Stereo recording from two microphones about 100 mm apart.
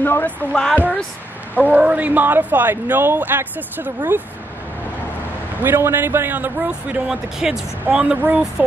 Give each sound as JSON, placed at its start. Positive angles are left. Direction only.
{"t": 0.0, "sound": "speech", "side_deg": 20}
{"t": 1.6, "sound": "speech", "side_deg": -15}
{"t": 5.6, "sound": "speech", "side_deg": -20}
{"t": 7.1, "sound": "speech", "side_deg": -5}